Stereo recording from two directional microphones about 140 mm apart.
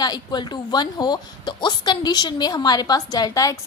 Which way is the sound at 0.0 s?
30° left (ahead or behind).